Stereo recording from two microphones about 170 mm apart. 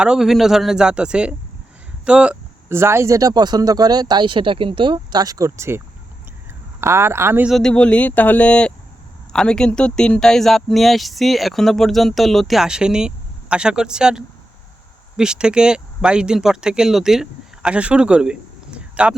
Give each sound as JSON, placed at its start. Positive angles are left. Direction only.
{"t": 0.0, "sound": "speech", "side_deg": -5}
{"t": 7.5, "sound": "speech", "side_deg": 5}